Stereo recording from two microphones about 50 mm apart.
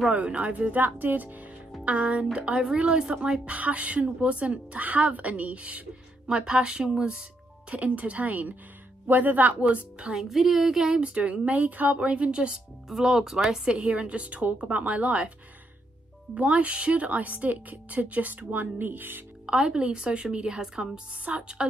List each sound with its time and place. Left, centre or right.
0.1 s speech: right
10.1 s speech: centre
10.9 s speech: right
12.8 s speech: centre; by 15.3 s right
16.3 s speech: right
19.4 s speech: centre